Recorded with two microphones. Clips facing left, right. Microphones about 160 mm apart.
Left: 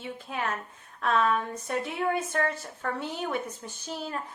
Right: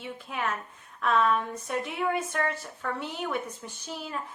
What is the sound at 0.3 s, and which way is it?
Speech, 35° left (ahead or behind).